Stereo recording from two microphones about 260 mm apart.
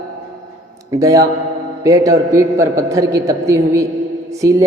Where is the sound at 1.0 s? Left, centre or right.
Centre.